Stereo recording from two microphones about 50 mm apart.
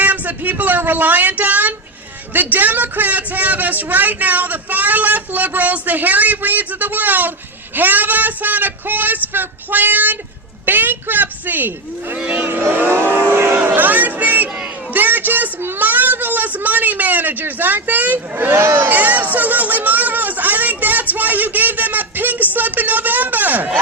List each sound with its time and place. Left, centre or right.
0.0 s speech: right
12.2 s speech: right
12.7 s speech: right
13.1 s vehicle: right
13.7 s a sound: right
22.5 s speech: right